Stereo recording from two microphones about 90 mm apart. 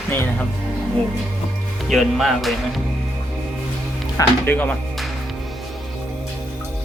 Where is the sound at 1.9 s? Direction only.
Centre (ahead or behind).